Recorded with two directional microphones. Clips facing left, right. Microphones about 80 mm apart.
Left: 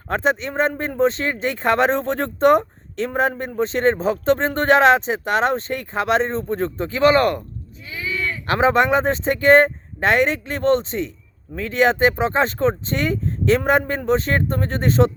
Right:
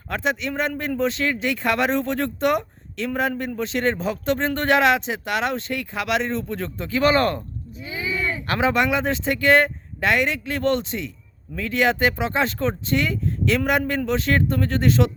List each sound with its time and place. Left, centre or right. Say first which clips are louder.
0.1 s speech: left 4 dB; left
7.9 s a sound: even; centre
8.4 s speech: left 5 dB; left